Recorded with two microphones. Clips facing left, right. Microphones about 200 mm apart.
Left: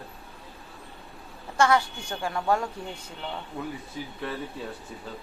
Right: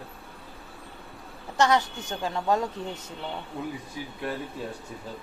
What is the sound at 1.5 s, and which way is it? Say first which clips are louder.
A woman's voice: even; 20° right (ahead or behind).